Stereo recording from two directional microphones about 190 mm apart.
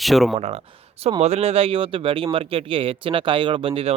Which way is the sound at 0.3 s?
35° right (ahead or behind).